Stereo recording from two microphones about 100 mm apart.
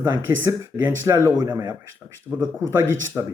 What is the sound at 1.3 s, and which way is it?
Speech, 45° right (ahead or behind).